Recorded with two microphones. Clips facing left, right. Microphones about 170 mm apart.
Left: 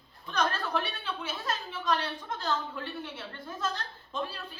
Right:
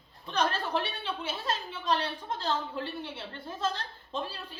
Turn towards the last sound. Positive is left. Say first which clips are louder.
# even
turn(degrees=-30)  # may be behind; listen again after turning